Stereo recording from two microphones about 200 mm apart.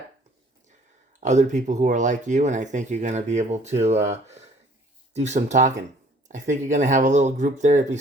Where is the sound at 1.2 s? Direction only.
35° right (ahead or behind).